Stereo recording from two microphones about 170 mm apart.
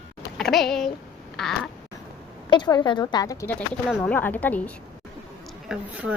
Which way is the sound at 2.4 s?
25° left (ahead or behind).